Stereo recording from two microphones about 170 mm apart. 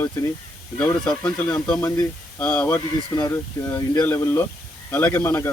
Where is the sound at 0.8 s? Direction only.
5° left (ahead or behind).